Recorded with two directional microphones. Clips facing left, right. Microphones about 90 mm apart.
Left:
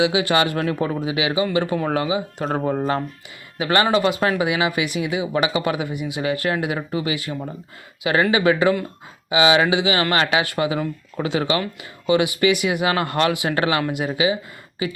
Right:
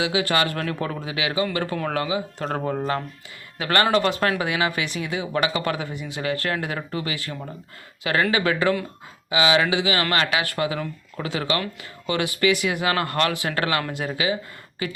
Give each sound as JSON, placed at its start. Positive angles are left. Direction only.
{"t": 0.0, "sound": "speech", "side_deg": 20}